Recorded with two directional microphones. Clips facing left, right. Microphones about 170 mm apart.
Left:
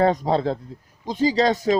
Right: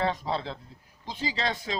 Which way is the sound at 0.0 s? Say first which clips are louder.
Left 10 dB; 45° left (ahead or behind).